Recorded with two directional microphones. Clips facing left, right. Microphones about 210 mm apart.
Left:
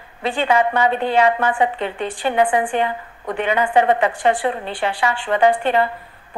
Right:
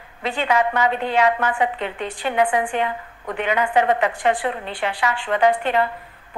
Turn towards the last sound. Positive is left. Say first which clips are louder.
# left 2 dB
turn(degrees=30)  # may be behind; listen again after turning